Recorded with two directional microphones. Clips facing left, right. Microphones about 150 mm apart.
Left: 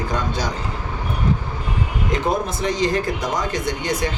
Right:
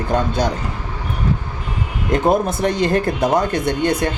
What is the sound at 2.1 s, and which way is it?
Speech, 55° right (ahead or behind).